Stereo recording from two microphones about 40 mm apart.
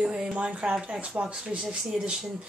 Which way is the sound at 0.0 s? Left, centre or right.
Right.